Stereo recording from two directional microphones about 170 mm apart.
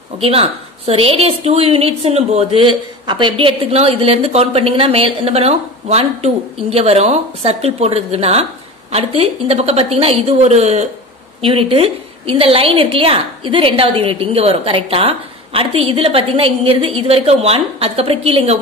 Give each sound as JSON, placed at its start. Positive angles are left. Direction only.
{"t": 0.2, "sound": "a woman's voice", "side_deg": -35}